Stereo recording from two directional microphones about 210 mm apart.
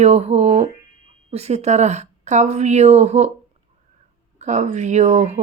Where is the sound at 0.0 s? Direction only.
30° right (ahead or behind).